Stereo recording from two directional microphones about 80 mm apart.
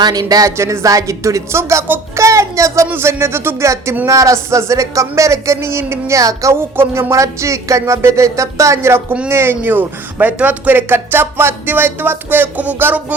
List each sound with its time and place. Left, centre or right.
0.0 s speech: right
0.5 s speech: right